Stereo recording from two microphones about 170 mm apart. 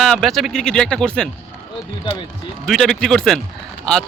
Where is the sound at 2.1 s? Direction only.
25° left (ahead or behind).